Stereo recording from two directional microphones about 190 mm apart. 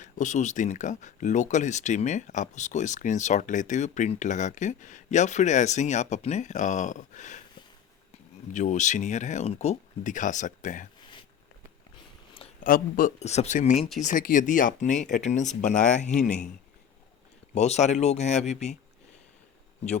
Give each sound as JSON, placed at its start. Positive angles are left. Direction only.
{"t": 0.0, "sound": "speech", "side_deg": 40}
{"t": 8.5, "sound": "speech", "side_deg": 40}
{"t": 12.6, "sound": "speech", "side_deg": 45}
{"t": 17.5, "sound": "speech", "side_deg": 35}